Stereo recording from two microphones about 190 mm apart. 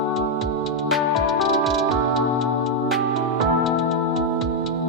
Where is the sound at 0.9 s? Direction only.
Centre (ahead or behind).